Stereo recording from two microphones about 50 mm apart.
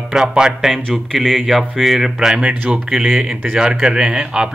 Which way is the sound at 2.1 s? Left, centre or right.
Centre.